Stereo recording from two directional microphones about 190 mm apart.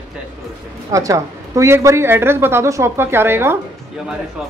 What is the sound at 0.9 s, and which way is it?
A woman's voice, 15° right (ahead or behind).